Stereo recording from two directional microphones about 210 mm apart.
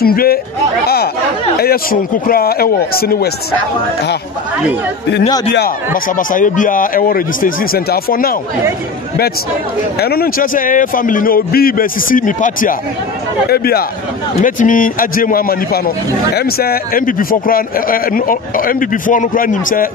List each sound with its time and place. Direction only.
0.0 s speech: 45° left (ahead or behind)
0.8 s chatter: 50° left (ahead or behind)
1.6 s speech: 45° left (ahead or behind)
6.0 s a man's voice: 40° left (ahead or behind)
9.9 s a man's voice: 45° left (ahead or behind)